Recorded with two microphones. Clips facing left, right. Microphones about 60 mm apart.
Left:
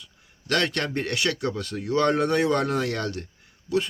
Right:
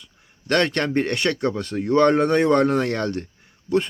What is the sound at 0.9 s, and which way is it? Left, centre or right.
Speech, right.